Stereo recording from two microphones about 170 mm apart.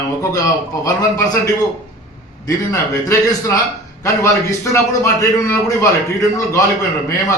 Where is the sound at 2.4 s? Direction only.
20° left (ahead or behind).